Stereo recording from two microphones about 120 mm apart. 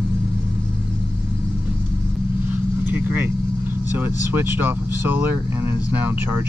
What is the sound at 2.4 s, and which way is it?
Vehicle, 15° right (ahead or behind).